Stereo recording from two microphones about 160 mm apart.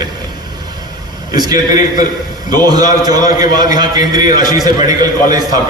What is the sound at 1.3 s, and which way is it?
A man's voice, 25° right (ahead or behind).